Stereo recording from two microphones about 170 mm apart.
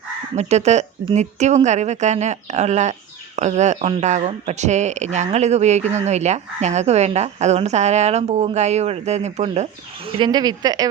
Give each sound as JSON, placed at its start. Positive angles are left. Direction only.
{"t": 0.3, "sound": "a woman's voice", "side_deg": -40}
{"t": 10.1, "sound": "speech", "side_deg": -30}